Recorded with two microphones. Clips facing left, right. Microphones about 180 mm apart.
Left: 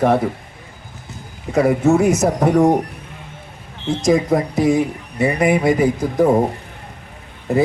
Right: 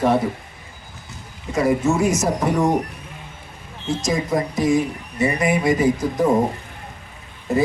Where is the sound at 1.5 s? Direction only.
60° left (ahead or behind).